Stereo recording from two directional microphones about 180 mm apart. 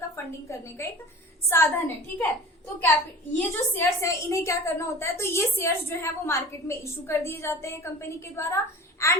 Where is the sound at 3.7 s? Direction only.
15° left (ahead or behind).